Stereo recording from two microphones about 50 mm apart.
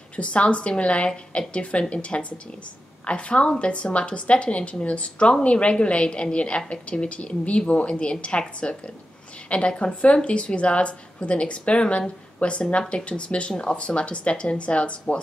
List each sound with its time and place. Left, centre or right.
0.1 s a woman's voice: left